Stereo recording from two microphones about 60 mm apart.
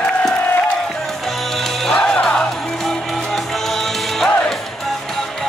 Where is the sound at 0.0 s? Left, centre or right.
Centre.